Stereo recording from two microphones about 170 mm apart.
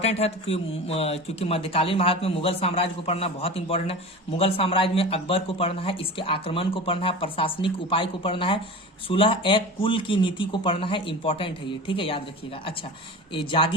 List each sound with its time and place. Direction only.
0.0 s speech: 40° left (ahead or behind)
13.3 s speech: 30° left (ahead or behind)